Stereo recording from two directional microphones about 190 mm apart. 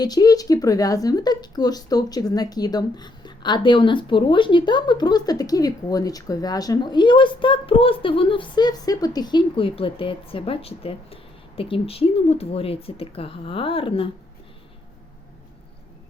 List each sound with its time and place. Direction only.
0.0 s speech: 20° left (ahead or behind)